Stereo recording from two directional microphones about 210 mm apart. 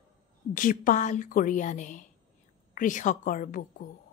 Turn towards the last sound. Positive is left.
turn(degrees=40)  # may be behind; listen again after turning